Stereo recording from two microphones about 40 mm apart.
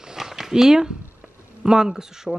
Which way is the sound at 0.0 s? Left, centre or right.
Centre.